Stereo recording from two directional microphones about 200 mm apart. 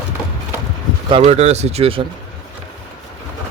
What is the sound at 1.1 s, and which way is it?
Speech, 30° right (ahead or behind).